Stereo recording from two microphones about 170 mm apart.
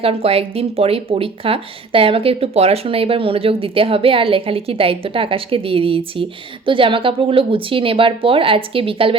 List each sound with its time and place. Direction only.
0.0 s speech: 35° right (ahead or behind)